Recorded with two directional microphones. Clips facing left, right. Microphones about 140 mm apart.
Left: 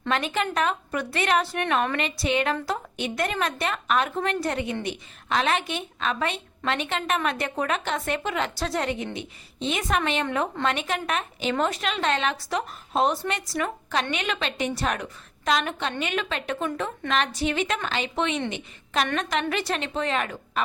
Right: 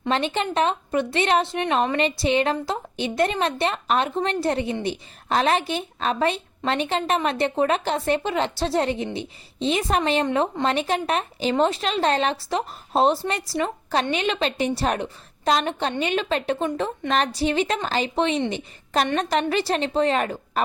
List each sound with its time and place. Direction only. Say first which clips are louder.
0.1 s a woman's voice: right 2 dB; 30° right (ahead or behind)